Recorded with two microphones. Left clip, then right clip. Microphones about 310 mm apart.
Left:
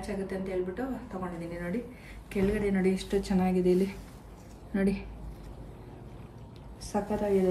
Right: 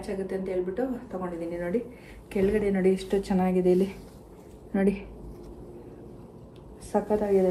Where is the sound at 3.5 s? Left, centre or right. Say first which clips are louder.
Right 3 dB; centre.